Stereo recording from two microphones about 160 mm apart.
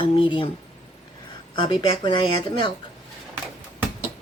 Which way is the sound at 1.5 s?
30° left (ahead or behind).